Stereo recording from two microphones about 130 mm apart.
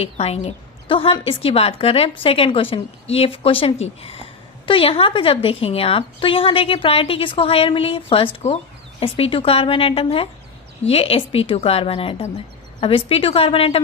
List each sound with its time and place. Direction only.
0.0 s a woman's voice: 55° left (ahead or behind)